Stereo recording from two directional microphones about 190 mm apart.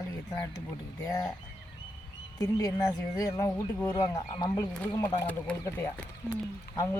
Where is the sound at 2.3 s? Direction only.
20° left (ahead or behind).